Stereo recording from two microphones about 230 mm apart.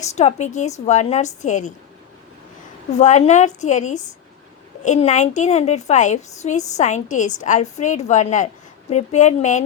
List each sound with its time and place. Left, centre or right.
0.0 s a woman's voice: left
3.0 s a woman's voice: left